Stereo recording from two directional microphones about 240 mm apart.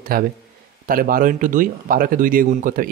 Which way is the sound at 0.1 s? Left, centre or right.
Right.